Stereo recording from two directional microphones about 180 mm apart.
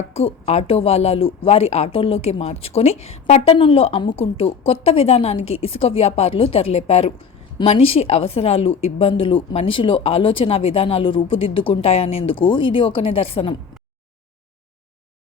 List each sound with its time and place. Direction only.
0.1 s speech: 35° left (ahead or behind)